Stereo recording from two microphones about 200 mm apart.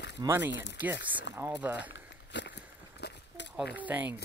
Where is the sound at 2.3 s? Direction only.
60° left (ahead or behind).